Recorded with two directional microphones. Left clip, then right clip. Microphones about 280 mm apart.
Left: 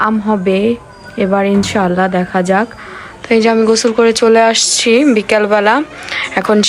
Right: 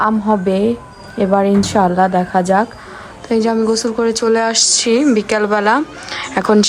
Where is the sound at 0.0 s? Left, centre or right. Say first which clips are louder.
Left 1 dB; centre.